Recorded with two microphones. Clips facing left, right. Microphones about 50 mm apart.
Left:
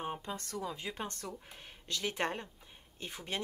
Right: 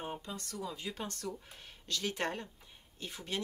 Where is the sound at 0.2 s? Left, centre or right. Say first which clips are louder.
Left 2 dB; left.